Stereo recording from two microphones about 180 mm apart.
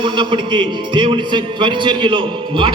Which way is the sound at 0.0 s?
25° right (ahead or behind).